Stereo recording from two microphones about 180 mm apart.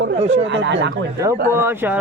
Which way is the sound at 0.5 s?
90° right.